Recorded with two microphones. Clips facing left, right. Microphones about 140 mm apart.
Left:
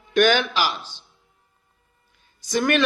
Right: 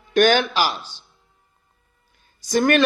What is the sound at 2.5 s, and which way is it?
Speech, 40° right (ahead or behind).